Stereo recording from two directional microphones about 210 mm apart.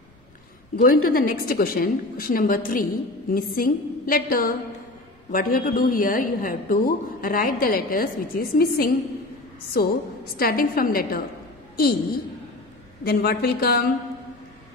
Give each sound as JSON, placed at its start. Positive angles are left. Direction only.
{"t": 0.7, "sound": "a woman's voice", "side_deg": 45}